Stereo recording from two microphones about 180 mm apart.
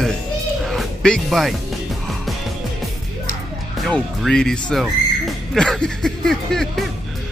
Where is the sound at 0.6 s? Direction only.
Centre (ahead or behind).